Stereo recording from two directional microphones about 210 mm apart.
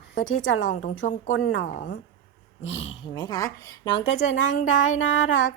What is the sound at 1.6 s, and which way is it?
Speech, 45° left (ahead or behind).